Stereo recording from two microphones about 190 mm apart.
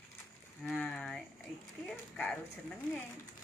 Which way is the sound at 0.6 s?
5° left (ahead or behind).